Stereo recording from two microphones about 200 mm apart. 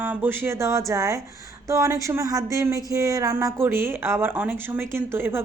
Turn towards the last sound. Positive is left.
turn(degrees=-10)  # may be behind; listen again after turning